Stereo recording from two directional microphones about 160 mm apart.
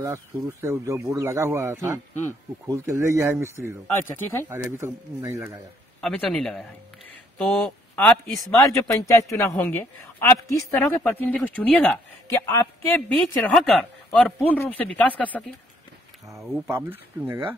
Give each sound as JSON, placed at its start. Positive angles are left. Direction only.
{"t": 0.0, "sound": "speech", "side_deg": -15}
{"t": 3.8, "sound": "speech", "side_deg": 15}
{"t": 4.5, "sound": "speech", "side_deg": -15}
{"t": 5.9, "sound": "speech", "side_deg": 0}
{"t": 13.1, "sound": "speech", "side_deg": 5}
{"t": 16.3, "sound": "speech", "side_deg": -20}